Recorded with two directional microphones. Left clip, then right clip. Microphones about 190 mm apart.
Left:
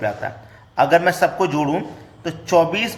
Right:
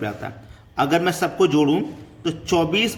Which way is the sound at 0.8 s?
20° right (ahead or behind).